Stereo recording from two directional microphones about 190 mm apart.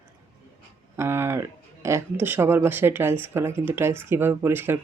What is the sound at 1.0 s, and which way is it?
Speech, 15° right (ahead or behind).